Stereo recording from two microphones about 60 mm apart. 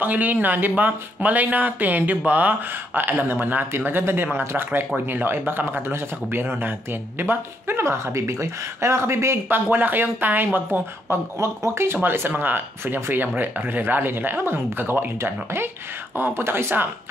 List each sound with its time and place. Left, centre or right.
0.0 s a man's voice: right
11.3 s speech: right
12.0 s a man's voice: right